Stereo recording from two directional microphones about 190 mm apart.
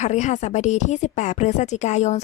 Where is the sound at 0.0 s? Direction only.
40° left (ahead or behind).